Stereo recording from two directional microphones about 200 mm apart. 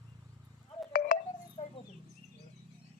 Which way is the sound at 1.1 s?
45° left (ahead or behind).